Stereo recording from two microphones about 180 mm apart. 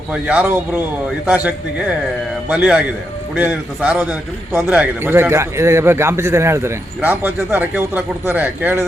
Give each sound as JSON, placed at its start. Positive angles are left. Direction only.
{"t": 0.1, "sound": "a man's voice", "side_deg": -5}
{"t": 2.5, "sound": "a man's voice", "side_deg": -5}